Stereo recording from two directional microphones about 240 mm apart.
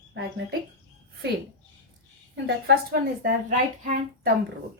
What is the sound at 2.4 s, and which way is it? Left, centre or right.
A woman's voice, right.